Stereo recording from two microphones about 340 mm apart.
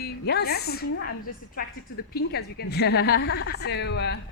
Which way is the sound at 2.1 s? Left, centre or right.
Left.